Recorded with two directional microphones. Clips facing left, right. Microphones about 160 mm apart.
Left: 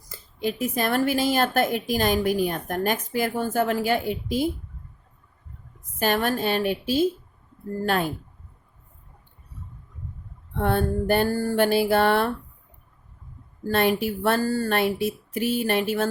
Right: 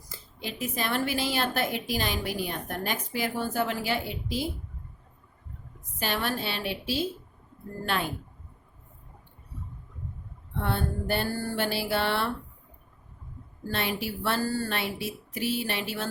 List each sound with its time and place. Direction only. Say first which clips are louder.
0.1 s speech: left 10 dB; 50° left (ahead or behind)
6.0 s speech: left 7 dB; 45° left (ahead or behind)
10.6 s speech: left 7 dB; 50° left (ahead or behind)
13.7 s speech: left 9 dB; 50° left (ahead or behind)